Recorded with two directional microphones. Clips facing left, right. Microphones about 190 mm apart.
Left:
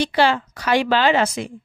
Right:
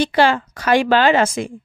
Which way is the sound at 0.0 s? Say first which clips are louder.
Right 2 dB; 50° right (ahead or behind).